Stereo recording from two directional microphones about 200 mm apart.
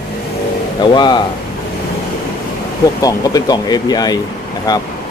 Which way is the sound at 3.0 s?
20° left (ahead or behind).